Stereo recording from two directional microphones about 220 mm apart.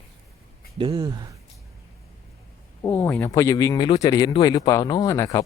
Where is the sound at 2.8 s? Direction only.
10° left (ahead or behind).